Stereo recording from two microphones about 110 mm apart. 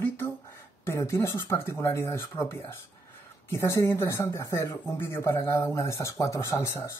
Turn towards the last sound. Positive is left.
turn(degrees=25)  # may be behind; listen again after turning